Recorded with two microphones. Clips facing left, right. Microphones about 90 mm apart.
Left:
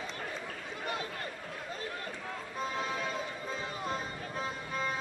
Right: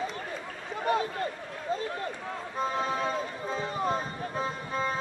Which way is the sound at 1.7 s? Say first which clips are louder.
Right 13 dB; 30° right (ahead or behind).